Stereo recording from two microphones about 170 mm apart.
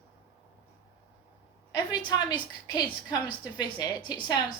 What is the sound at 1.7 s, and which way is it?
A woman's voice, 25° left (ahead or behind).